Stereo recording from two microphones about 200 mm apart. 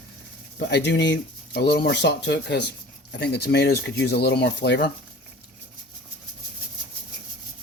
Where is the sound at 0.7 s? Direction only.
55° left (ahead or behind).